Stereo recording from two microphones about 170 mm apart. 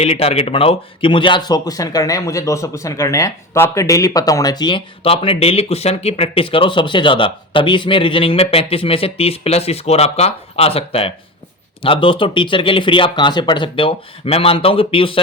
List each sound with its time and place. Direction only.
0.0 s speech: 35° left (ahead or behind)